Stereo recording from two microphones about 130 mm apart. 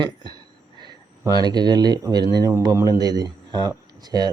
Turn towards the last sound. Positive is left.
turn(degrees=-30)  # may be behind; listen again after turning